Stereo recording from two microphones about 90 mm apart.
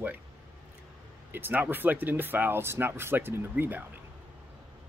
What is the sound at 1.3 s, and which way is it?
Speech, 20° right (ahead or behind).